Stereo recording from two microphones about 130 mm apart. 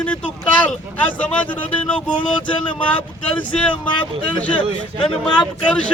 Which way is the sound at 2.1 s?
35° left (ahead or behind).